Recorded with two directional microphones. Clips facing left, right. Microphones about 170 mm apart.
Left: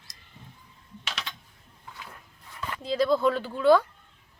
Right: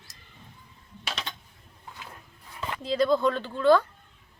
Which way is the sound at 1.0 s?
35° right (ahead or behind).